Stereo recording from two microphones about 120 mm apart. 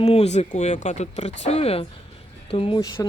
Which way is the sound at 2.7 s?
35° left (ahead or behind).